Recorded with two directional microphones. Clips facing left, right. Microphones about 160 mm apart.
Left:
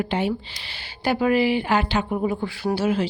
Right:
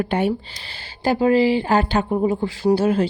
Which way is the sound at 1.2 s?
30° right (ahead or behind).